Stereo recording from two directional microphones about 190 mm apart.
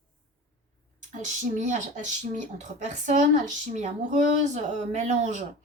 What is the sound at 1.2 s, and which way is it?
A woman's voice, 40° right (ahead or behind).